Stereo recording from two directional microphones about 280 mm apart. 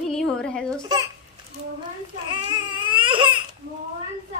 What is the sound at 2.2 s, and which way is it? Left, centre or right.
Baby cry, centre.